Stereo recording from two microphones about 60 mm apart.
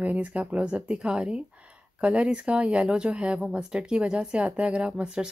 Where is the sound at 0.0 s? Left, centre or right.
Right.